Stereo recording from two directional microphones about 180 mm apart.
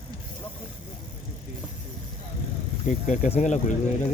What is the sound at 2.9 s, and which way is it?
Speech, 40° left (ahead or behind).